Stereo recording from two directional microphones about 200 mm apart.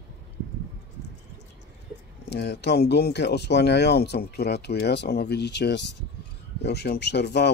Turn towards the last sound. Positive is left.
turn(degrees=55)  # may be behind; listen again after turning